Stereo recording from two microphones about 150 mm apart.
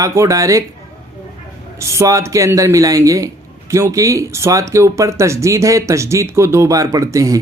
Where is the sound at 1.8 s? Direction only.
20° right (ahead or behind).